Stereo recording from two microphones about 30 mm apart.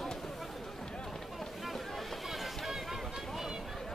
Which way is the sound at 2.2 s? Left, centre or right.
Centre.